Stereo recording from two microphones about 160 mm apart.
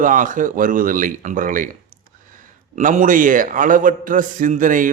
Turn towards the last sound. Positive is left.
turn(degrees=-55)  # may be behind; listen again after turning